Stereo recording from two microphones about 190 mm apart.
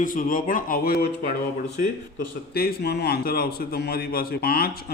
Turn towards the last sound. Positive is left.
turn(degrees=55)  # may be behind; listen again after turning